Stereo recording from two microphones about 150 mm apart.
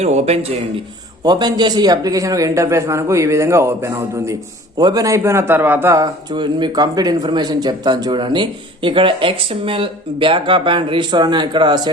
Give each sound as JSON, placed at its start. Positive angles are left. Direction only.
{"t": 0.0, "sound": "speech", "side_deg": -45}
{"t": 1.2, "sound": "a man's voice", "side_deg": -25}
{"t": 6.3, "sound": "speech", "side_deg": -30}